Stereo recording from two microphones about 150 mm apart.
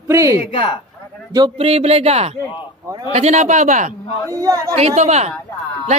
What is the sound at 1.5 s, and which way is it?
Speech, 45° right (ahead or behind).